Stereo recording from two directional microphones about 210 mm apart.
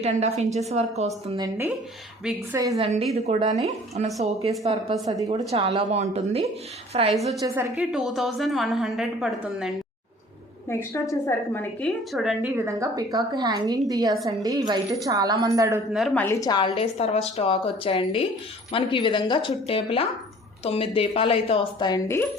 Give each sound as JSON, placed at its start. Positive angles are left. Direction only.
{"t": 0.0, "sound": "a woman's voice", "side_deg": -30}
{"t": 1.4, "sound": "a woman's voice", "side_deg": -10}
{"t": 2.7, "sound": "a woman's voice", "side_deg": -30}
{"t": 5.0, "sound": "a woman's voice", "side_deg": -15}
{"t": 5.3, "sound": "speech", "side_deg": -25}
{"t": 7.2, "sound": "a woman's voice", "side_deg": 0}
{"t": 10.7, "sound": "a woman's voice", "side_deg": 15}
{"t": 15.9, "sound": "a woman's voice", "side_deg": 0}